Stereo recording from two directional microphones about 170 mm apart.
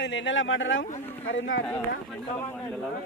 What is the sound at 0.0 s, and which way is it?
Speech, 90° left.